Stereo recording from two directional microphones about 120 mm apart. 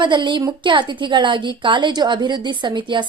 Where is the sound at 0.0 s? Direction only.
40° right (ahead or behind).